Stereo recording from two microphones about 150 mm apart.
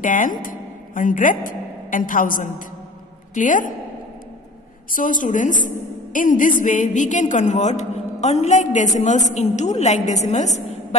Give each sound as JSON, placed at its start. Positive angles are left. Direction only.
{"t": 0.0, "sound": "a woman's voice", "side_deg": 60}
{"t": 4.9, "sound": "a woman's voice", "side_deg": 60}